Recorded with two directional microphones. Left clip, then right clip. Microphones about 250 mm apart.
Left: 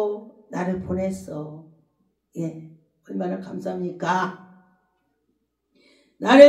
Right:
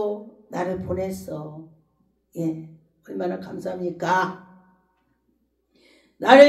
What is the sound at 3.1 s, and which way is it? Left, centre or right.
Speech, right.